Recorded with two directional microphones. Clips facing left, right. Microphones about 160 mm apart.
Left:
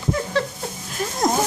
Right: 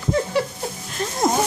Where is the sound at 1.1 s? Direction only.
Centre (ahead or behind).